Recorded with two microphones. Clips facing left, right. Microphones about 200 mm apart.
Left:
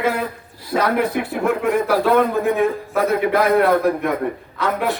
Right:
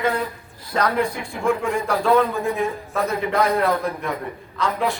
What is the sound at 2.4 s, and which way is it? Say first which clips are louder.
A man's voice: left 5 dB; 60° left (ahead or behind).